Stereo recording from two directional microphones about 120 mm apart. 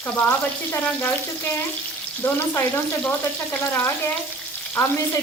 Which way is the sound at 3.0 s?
10° left (ahead or behind).